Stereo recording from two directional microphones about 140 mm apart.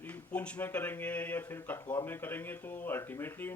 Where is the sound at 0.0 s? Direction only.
10° left (ahead or behind).